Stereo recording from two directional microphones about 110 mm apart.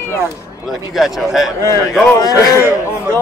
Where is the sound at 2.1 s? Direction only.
30° left (ahead or behind).